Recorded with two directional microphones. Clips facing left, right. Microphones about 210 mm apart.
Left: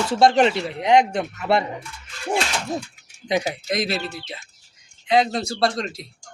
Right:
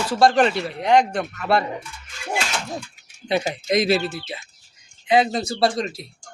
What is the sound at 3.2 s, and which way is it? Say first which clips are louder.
Speech: even; 15° left (ahead or behind).